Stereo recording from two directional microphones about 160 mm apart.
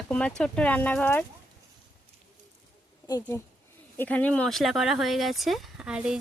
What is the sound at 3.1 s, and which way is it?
Speech, 15° left (ahead or behind).